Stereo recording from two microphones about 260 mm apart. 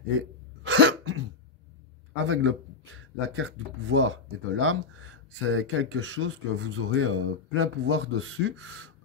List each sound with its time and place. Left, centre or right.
0.7 s cough: right
2.2 s speech: right